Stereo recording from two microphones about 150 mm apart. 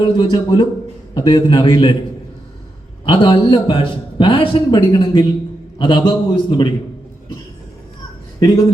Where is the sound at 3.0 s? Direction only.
30° left (ahead or behind).